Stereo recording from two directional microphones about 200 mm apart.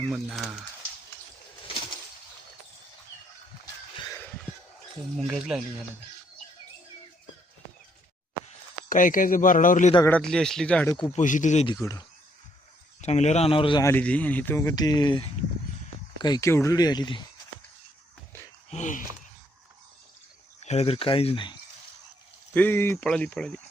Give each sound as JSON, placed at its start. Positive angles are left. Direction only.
{"t": 0.1, "sound": "speech", "side_deg": 0}
{"t": 5.1, "sound": "speech", "side_deg": 0}
{"t": 8.9, "sound": "speech", "side_deg": 40}
{"t": 10.1, "sound": "speech", "side_deg": 5}
{"t": 11.1, "sound": "speech", "side_deg": 40}
{"t": 11.6, "sound": "speech", "side_deg": 20}
{"t": 13.0, "sound": "speech", "side_deg": 35}
{"t": 13.8, "sound": "speech", "side_deg": 10}
{"t": 18.7, "sound": "speech", "side_deg": 40}
{"t": 20.6, "sound": "speech", "side_deg": 35}
{"t": 22.5, "sound": "speech", "side_deg": 10}